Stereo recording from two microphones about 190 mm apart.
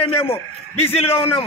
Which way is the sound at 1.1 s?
10° left (ahead or behind).